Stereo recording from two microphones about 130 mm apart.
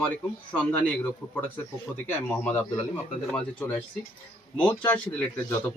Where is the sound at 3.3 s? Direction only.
10° left (ahead or behind).